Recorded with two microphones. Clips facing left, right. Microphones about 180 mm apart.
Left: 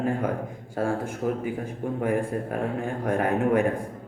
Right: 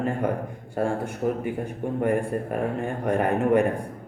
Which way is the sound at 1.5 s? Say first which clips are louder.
Right 2 dB; centre (ahead or behind).